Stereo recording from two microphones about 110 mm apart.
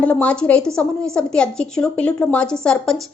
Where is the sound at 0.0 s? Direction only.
15° left (ahead or behind).